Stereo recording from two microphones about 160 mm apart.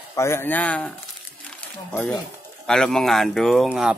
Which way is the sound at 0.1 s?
15° left (ahead or behind).